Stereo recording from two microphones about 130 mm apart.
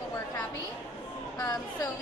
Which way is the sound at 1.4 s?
30° left (ahead or behind).